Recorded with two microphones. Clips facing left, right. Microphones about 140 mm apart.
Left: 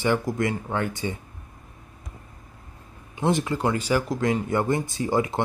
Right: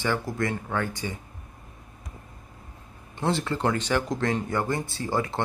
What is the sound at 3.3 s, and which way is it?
Speech, 15° left (ahead or behind).